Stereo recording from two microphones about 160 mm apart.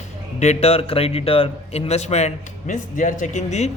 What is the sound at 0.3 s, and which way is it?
Speech, 40° left (ahead or behind).